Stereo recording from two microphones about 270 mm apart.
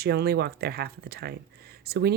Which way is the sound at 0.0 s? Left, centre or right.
Right.